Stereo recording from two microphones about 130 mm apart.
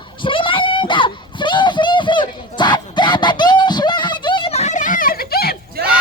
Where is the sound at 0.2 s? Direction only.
40° left (ahead or behind); by 5.1 s 90° left.